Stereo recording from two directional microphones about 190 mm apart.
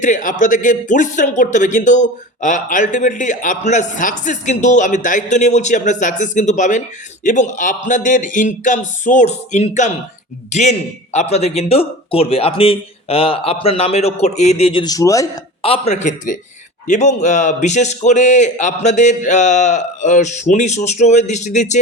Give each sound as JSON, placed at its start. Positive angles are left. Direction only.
{"t": 0.0, "sound": "a man's voice", "side_deg": 40}
{"t": 15.6, "sound": "speech", "side_deg": 35}